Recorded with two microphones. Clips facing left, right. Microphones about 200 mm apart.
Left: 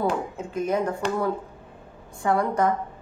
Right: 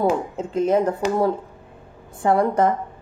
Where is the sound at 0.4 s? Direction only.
25° right (ahead or behind).